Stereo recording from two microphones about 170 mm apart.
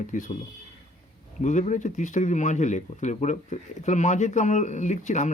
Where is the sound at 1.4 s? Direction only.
45° left (ahead or behind).